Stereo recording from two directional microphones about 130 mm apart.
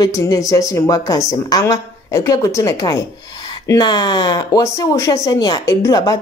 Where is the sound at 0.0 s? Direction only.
25° left (ahead or behind).